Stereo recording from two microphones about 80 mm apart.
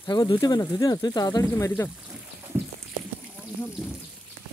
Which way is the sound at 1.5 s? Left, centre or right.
Left.